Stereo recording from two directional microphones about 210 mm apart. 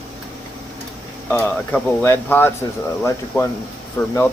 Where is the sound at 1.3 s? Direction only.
5° left (ahead or behind).